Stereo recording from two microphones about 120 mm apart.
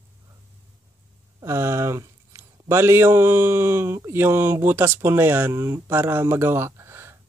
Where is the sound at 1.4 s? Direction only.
25° right (ahead or behind).